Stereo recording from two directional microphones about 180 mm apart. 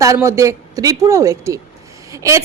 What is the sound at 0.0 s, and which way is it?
A woman's voice, 15° right (ahead or behind).